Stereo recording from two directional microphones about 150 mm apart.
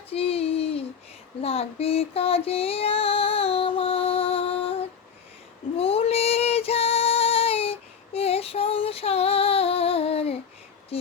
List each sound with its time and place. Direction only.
0.1 s a sound: 40° left (ahead or behind)
1.4 s female singing: 40° left (ahead or behind)
5.7 s female singing: 40° left (ahead or behind)